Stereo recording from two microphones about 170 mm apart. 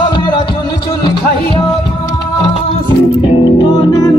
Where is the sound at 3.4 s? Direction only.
25° left (ahead or behind).